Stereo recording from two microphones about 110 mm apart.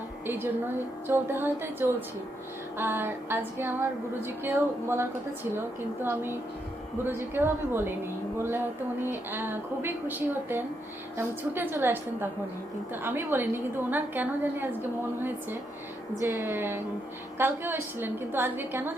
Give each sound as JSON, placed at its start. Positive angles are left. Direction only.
{"t": 1.0, "sound": "a woman's voice", "side_deg": -20}